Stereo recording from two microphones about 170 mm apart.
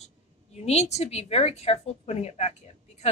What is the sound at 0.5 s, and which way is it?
A woman's voice, 40° left (ahead or behind).